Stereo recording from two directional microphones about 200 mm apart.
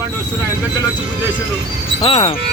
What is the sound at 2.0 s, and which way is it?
Speech, 30° left (ahead or behind).